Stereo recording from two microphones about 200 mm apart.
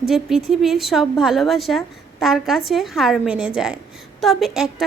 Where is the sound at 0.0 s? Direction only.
Centre (ahead or behind).